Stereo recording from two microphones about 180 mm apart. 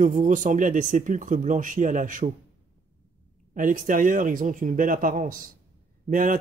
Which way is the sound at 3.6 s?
45° right (ahead or behind).